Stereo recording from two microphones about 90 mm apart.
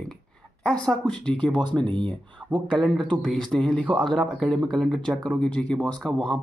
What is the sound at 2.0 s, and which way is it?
Speech, 65° right (ahead or behind).